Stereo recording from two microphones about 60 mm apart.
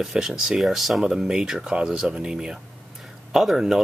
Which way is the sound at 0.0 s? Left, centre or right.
Centre.